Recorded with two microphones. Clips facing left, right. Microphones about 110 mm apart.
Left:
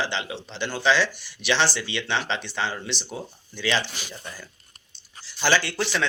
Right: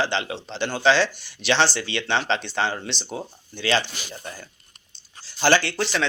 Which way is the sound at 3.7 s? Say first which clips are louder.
Right 3 dB; 40° right (ahead or behind).